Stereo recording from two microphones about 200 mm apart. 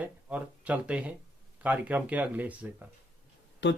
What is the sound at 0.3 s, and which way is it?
Speech, 5° right (ahead or behind).